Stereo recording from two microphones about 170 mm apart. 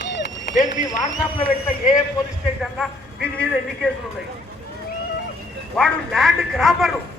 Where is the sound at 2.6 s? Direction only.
5° left (ahead or behind).